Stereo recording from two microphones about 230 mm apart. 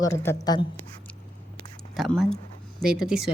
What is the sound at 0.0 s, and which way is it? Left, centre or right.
Speech, centre.